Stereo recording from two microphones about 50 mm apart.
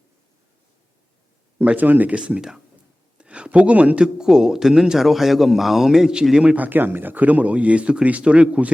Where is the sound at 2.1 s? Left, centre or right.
Centre.